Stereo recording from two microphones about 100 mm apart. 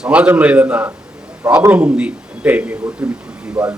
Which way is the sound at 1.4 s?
30° right (ahead or behind).